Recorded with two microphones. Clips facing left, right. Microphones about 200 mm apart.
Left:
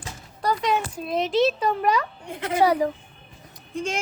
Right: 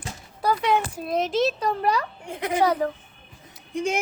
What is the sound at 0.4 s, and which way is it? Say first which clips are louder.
Speech: right 1 dB; 10° right (ahead or behind).